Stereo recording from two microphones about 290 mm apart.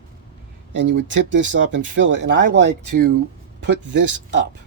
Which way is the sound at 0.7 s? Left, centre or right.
Right.